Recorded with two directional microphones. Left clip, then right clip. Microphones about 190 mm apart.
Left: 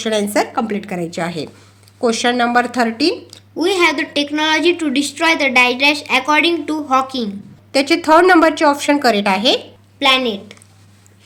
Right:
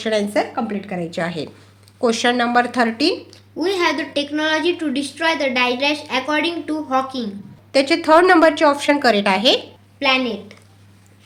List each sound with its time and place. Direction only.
0.0 s speech: 15° left (ahead or behind)
3.2 s a woman's voice: 40° left (ahead or behind)
7.7 s speech: 10° left (ahead or behind)
10.0 s a woman's voice: 40° left (ahead or behind)